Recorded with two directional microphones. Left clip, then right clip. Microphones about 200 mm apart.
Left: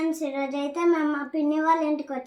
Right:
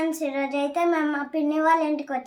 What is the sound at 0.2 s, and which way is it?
Child singing, 15° right (ahead or behind).